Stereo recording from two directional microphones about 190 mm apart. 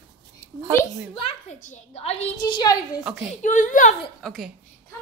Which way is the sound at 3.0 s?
5° right (ahead or behind).